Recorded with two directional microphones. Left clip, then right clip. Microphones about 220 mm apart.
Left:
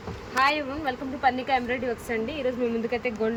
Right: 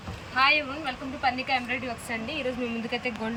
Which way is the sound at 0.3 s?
15° left (ahead or behind).